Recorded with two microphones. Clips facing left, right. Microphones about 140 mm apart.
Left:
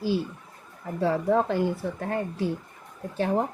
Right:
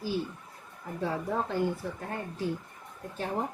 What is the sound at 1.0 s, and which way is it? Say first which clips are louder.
Speech: left 8 dB; 90° left.